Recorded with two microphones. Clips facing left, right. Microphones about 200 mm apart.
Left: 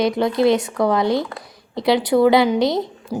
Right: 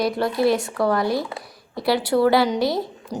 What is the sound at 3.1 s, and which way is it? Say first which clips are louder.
Speech: left 4 dB; 5° left (ahead or behind).